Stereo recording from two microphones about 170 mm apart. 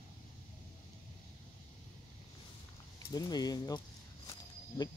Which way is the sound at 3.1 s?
25° left (ahead or behind).